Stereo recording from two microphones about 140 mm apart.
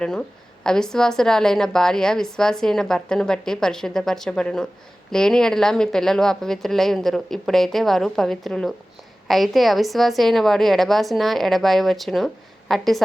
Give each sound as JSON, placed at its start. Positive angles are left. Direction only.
{"t": 0.0, "sound": "a woman's voice", "side_deg": 5}